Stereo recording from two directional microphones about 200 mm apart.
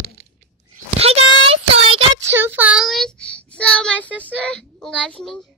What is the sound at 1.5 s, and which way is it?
Child singing, 30° right (ahead or behind).